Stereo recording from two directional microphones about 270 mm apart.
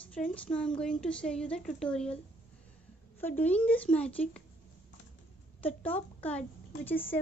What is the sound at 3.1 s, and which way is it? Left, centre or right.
A woman's voice, centre.